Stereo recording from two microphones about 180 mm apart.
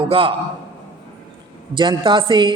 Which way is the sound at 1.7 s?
25° right (ahead or behind).